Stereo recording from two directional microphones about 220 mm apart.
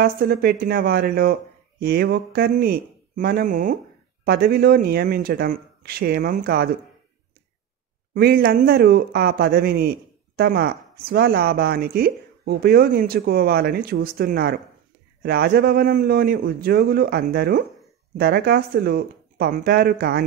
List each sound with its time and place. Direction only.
0.0 s speech: 45° right (ahead or behind)
8.1 s speech: 45° right (ahead or behind)